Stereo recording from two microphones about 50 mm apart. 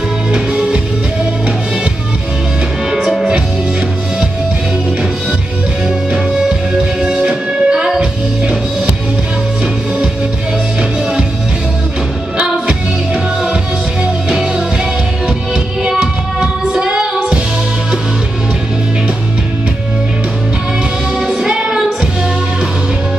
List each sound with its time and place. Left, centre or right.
0.3 s music: right
7.2 s music: centre
16.8 s music: centre
21.4 s music: centre